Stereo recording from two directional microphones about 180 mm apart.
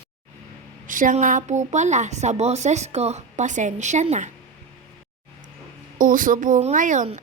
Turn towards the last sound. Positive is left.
turn(degrees=-45)  # may be behind; listen again after turning